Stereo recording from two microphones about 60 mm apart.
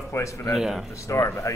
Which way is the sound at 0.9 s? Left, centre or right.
Left.